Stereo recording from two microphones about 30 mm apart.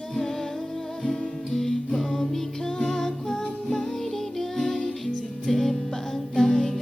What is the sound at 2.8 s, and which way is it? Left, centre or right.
Music, centre.